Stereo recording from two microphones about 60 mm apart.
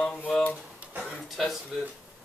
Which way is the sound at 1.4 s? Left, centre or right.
Centre.